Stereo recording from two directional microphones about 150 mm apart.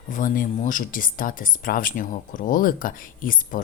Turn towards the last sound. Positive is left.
turn(degrees=65)  # may be behind; listen again after turning